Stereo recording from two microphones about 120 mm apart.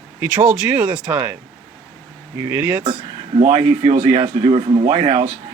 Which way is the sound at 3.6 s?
40° right (ahead or behind).